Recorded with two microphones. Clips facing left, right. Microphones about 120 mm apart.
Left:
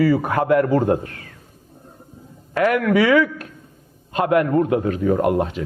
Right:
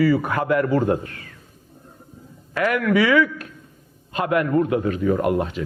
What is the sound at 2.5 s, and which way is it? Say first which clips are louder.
A man's voice: left 2 dB; 45° left (ahead or behind).